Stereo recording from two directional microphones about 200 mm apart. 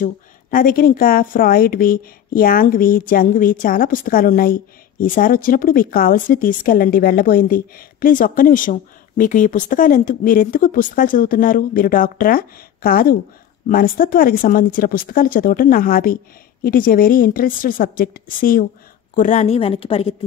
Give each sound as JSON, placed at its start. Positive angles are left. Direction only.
{"t": 0.0, "sound": "a woman's voice", "side_deg": 45}